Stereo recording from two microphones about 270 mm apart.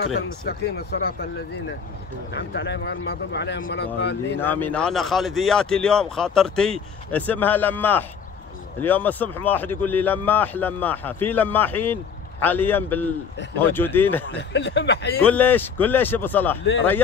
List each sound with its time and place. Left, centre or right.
0.5 s speech: left
2.3 s speech: left
4.4 s speech: centre
14.3 s speech: left
15.2 s speech: centre